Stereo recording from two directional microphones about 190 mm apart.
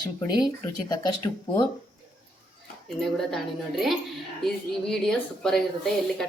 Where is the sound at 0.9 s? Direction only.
20° left (ahead or behind).